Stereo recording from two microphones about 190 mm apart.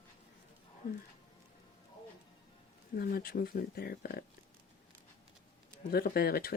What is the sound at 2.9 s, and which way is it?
Speech, 50° left (ahead or behind).